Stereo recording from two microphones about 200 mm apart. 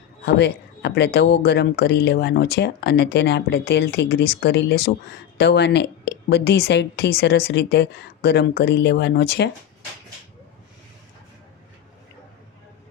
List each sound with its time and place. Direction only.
0.3 s speech: 60° left (ahead or behind)